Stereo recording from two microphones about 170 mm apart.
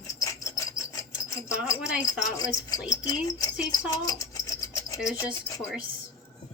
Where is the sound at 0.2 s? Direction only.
20° left (ahead or behind).